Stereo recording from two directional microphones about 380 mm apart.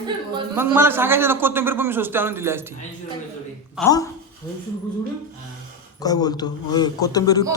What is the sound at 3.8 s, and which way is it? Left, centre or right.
Speech, centre.